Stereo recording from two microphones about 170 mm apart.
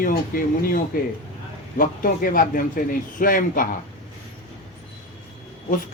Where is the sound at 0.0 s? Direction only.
60° left (ahead or behind).